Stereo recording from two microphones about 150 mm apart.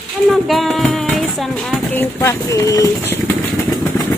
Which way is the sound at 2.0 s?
20° left (ahead or behind).